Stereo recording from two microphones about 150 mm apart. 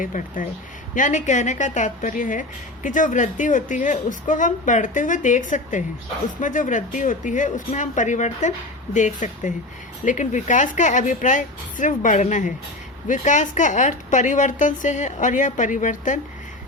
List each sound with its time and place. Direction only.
0.0 s a woman's voice: 65° left (ahead or behind)